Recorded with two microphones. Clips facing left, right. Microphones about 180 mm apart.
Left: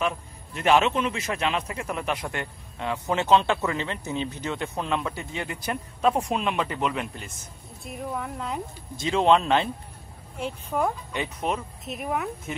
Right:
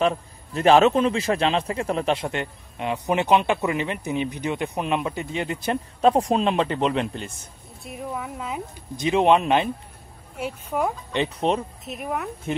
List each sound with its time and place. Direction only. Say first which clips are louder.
0.0 s a man's voice: right 6 dB; 35° right (ahead or behind)
7.8 s speech: right 1 dB; centre (ahead or behind)
8.9 s speech: right 2 dB; 20° right (ahead or behind)
11.3 s a man's voice: right 5 dB; 30° right (ahead or behind)
11.8 s speech: even; centre (ahead or behind)